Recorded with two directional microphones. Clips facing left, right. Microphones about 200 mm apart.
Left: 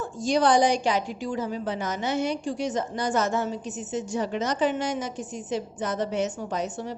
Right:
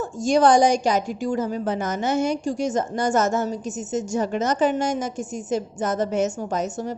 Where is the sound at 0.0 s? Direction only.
45° right (ahead or behind).